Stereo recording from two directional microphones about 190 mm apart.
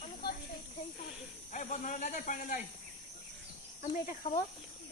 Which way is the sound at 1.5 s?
40° left (ahead or behind).